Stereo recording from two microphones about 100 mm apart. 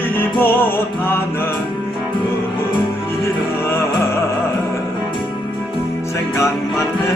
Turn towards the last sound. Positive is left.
turn(degrees=25)  # may be behind; listen again after turning